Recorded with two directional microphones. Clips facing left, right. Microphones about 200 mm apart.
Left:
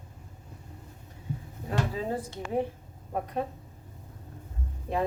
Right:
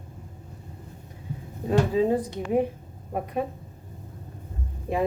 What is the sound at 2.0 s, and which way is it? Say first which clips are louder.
A woman's voice: right 9 dB; 15° right (ahead or behind).